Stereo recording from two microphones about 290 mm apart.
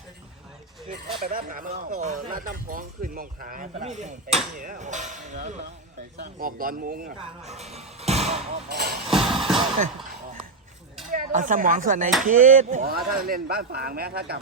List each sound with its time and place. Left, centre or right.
1.2 s speech: right
8.7 s speech: right
9.0 s music: centre
11.1 s speech: right